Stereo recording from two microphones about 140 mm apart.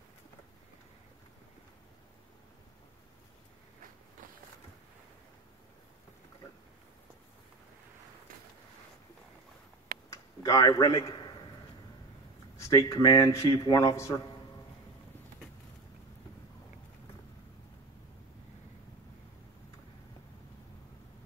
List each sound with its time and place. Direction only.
10.0 s tick-tock: 20° left (ahead or behind)
12.5 s a man's voice: 25° left (ahead or behind)